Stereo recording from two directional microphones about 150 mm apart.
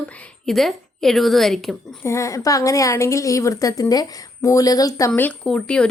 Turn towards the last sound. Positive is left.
turn(degrees=5)  # may be behind; listen again after turning